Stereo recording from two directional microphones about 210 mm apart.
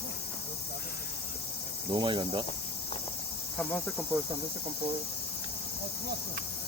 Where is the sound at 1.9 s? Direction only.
25° right (ahead or behind).